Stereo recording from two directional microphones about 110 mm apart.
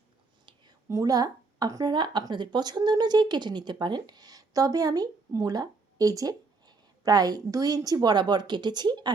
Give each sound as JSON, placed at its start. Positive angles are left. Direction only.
{"t": 0.9, "sound": "a woman's voice", "side_deg": -30}